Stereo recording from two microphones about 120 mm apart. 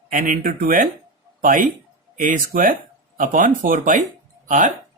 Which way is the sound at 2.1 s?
90° right.